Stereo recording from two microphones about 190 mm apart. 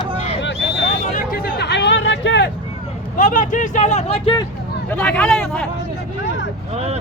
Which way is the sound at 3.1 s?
45° left (ahead or behind).